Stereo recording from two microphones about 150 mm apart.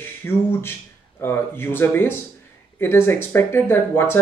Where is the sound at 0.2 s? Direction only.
15° left (ahead or behind).